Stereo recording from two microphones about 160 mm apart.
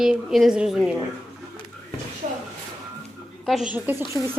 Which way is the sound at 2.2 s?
50° right (ahead or behind).